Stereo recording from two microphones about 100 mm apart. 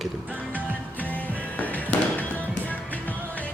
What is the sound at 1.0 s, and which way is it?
Music, 15° left (ahead or behind).